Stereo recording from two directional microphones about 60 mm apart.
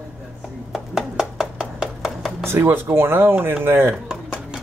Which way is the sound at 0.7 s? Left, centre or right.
Centre.